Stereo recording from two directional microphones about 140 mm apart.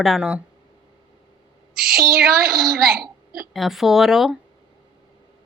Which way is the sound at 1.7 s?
90° right.